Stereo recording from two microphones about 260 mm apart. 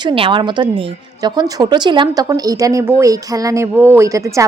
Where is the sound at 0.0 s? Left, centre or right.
Centre.